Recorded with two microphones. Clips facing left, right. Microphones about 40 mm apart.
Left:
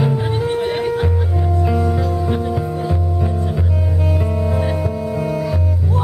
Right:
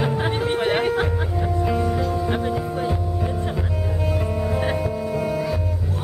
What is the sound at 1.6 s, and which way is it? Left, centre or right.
Music, centre.